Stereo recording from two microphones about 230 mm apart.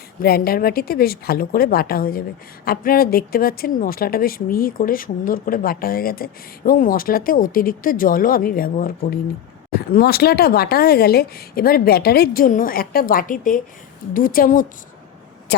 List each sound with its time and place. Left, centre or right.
0.2 s a woman's voice: left